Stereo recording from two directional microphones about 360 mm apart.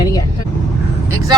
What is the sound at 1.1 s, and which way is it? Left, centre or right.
Speech, centre.